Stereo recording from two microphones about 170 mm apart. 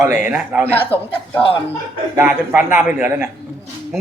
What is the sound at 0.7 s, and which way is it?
Speech, 10° left (ahead or behind).